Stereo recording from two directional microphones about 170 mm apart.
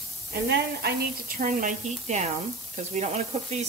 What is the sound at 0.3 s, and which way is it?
A woman's voice, 70° right (ahead or behind).